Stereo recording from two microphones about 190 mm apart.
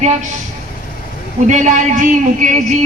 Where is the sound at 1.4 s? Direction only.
40° right (ahead or behind).